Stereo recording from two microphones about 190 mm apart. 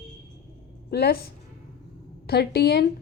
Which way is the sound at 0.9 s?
55° left (ahead or behind).